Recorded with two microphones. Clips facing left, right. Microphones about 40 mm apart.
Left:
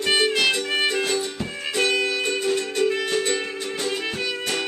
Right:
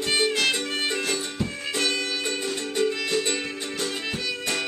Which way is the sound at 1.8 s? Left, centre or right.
Left.